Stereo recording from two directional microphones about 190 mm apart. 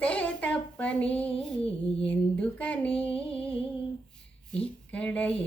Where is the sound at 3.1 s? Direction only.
5° left (ahead or behind).